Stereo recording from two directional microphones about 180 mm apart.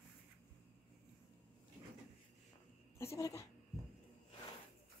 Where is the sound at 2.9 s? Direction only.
15° left (ahead or behind).